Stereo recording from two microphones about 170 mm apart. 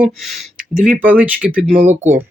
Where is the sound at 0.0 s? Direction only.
Centre (ahead or behind).